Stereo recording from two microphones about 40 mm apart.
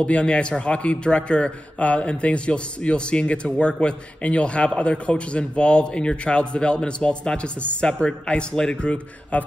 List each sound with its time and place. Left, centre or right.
0.0 s a man's voice: left